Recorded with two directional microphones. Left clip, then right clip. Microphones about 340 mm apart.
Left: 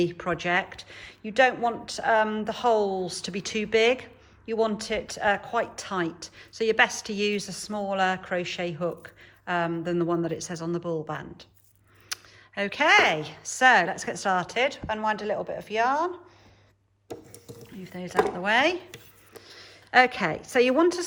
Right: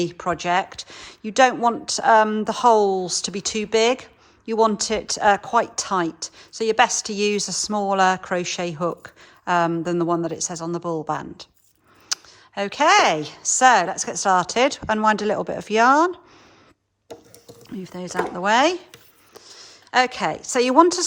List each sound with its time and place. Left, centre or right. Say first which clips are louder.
0.0 s speech: right 3 dB; centre
17.8 s a woman's voice: left 1 dB; centre